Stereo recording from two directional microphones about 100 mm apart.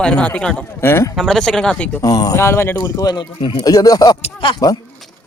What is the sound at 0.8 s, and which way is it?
Speech, 25° left (ahead or behind).